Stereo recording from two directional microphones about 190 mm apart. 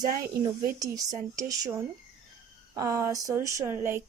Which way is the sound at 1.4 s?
20° right (ahead or behind).